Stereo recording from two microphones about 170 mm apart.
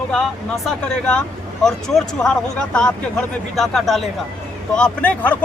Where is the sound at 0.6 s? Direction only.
5° left (ahead or behind).